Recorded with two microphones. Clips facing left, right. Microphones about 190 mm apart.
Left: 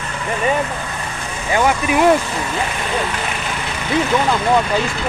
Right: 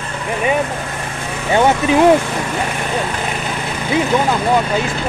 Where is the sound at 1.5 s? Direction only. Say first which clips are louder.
Right 3 dB; 25° right (ahead or behind).